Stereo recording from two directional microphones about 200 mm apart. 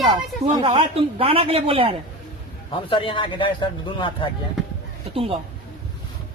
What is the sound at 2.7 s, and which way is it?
A man's voice, 25° left (ahead or behind).